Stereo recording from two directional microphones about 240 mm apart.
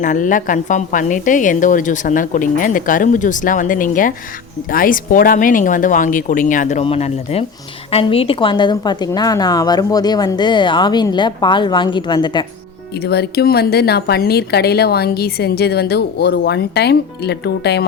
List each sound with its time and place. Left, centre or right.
0.0 s a woman's voice: left
13.1 s speech: left